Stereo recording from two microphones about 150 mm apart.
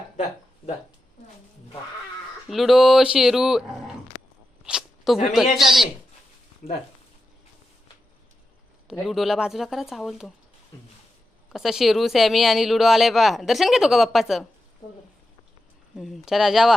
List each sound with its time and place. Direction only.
0.6 s speech: 40° left (ahead or behind)
2.5 s speech: centre (ahead or behind)
4.6 s a sound: 5° right (ahead or behind)
5.5 s speech: centre (ahead or behind)
8.9 s speech: centre (ahead or behind)
11.5 s speech: centre (ahead or behind)
16.0 s speech: centre (ahead or behind)